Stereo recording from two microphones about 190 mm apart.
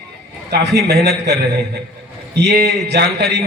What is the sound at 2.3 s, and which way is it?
A man's voice, 60° right (ahead or behind).